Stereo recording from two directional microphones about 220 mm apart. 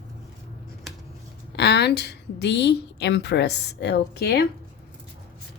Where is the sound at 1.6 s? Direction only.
50° left (ahead or behind).